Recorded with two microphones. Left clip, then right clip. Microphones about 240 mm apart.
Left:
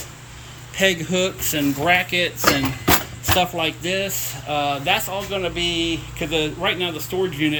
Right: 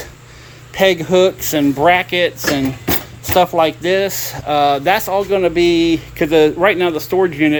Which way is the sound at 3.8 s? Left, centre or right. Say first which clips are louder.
Right 8 dB; centre.